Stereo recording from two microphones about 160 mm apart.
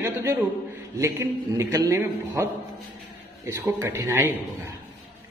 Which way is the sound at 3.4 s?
15° right (ahead or behind).